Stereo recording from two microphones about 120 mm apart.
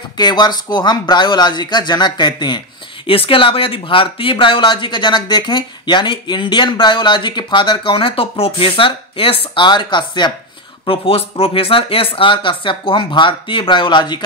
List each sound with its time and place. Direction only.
0.2 s speech: 35° left (ahead or behind)
10.9 s speech: 55° left (ahead or behind)